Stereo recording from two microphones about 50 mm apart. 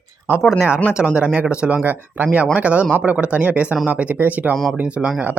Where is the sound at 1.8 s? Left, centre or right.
Right.